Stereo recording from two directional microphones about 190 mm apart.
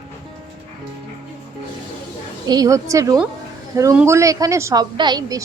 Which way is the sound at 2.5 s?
20° right (ahead or behind).